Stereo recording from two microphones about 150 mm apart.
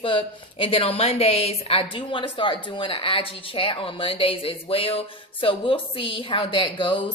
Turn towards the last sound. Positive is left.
turn(degrees=35)  # may be behind; listen again after turning